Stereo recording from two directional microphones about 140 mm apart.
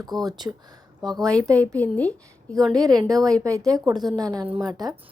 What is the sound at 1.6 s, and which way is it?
Speech, 10° left (ahead or behind).